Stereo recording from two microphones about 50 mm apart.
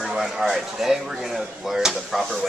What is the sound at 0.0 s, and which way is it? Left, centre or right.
Speech, centre.